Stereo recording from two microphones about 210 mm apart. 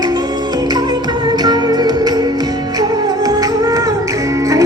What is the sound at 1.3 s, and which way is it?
Music, 20° right (ahead or behind).